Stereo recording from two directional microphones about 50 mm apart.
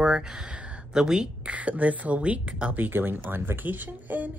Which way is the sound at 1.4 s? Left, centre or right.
Right.